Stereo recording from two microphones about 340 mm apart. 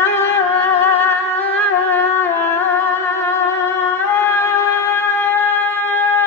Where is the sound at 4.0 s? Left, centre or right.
Centre.